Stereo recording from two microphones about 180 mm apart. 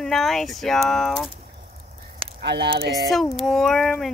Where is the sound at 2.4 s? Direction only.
70° right (ahead or behind).